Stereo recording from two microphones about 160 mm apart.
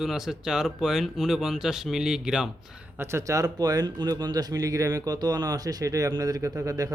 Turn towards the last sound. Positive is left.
turn(degrees=-20)  # may be behind; listen again after turning